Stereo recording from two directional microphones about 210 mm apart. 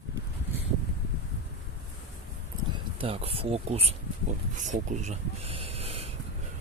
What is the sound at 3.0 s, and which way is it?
Speech, 30° right (ahead or behind).